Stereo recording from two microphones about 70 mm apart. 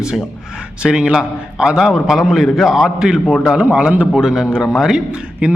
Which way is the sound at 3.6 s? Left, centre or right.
Centre.